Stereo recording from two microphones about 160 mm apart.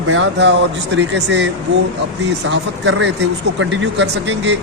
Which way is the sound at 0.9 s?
90° right.